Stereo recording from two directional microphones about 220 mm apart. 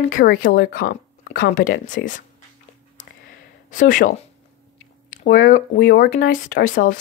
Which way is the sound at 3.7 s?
35° left (ahead or behind).